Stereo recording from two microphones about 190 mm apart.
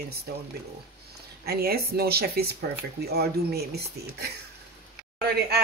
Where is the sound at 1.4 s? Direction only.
55° right (ahead or behind).